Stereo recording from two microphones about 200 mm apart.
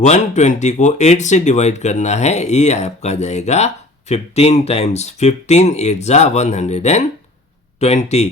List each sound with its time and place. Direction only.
0.0 s speech: 35° left (ahead or behind)